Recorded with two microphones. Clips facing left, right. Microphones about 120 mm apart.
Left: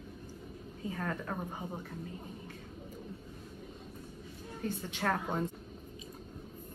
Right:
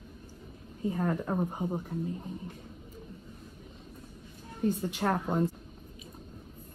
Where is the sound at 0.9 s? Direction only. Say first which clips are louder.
Right 7 dB; 15° right (ahead or behind).